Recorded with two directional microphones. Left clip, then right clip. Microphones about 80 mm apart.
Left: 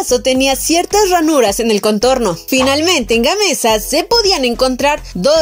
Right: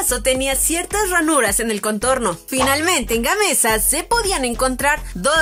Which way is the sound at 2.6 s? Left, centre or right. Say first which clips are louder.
Left 3 dB; left.